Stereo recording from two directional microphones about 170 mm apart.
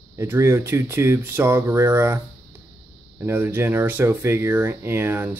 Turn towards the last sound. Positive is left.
turn(degrees=-15)  # may be behind; listen again after turning